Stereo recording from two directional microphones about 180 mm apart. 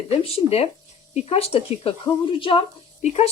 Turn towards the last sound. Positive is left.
turn(degrees=35)  # may be behind; listen again after turning